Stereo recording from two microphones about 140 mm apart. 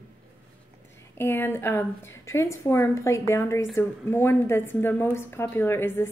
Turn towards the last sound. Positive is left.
turn(degrees=15)  # may be behind; listen again after turning